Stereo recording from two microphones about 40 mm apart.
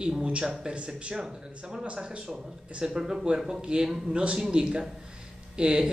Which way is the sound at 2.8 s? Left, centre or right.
Centre.